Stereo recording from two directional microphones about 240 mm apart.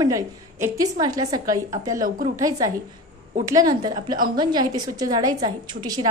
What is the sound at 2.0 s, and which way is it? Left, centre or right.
Speech, right.